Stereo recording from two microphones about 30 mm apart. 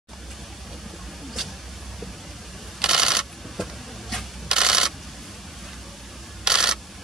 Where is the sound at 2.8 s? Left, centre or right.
Right.